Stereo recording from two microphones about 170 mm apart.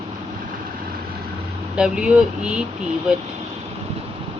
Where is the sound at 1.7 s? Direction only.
5° right (ahead or behind).